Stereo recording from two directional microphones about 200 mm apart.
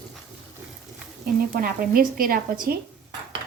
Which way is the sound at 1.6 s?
45° right (ahead or behind).